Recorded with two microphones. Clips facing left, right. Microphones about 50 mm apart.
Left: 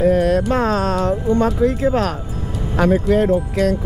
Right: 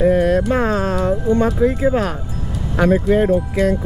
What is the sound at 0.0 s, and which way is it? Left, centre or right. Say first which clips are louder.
Music: right 1 dB; right.